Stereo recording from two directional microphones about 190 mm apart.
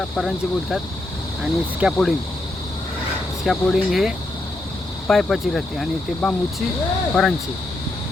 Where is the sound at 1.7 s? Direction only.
5° right (ahead or behind).